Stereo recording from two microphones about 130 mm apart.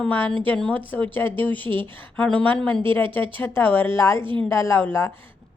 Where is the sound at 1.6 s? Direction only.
40° right (ahead or behind).